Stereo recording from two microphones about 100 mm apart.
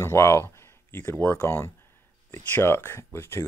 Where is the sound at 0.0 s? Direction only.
30° left (ahead or behind).